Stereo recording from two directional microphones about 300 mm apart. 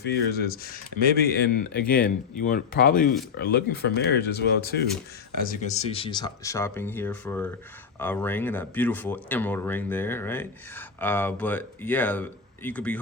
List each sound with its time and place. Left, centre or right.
0.0 s speech: left
5.5 s speech: left; by 13.0 s centre